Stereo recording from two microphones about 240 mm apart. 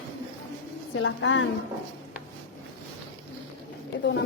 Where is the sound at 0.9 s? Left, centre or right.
Left.